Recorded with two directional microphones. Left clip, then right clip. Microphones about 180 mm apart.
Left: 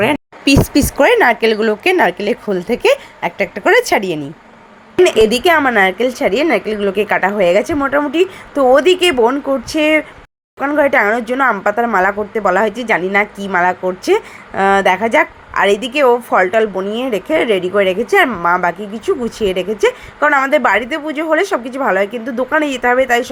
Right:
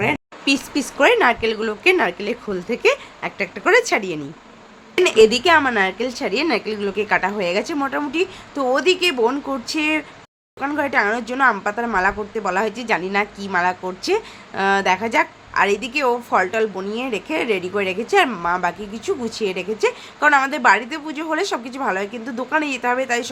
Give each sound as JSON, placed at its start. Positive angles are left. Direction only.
{"t": 0.0, "sound": "speech", "side_deg": 30}